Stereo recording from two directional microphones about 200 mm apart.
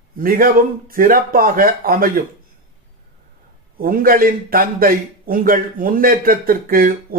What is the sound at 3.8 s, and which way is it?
A man's voice, 45° right (ahead or behind).